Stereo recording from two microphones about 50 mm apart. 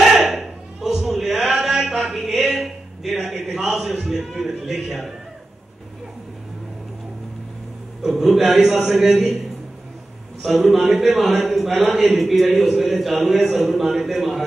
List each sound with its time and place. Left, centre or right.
0.0 s a sound: centre
3.5 s a man's voice: centre
8.0 s a man's voice: centre
10.4 s a man's voice: centre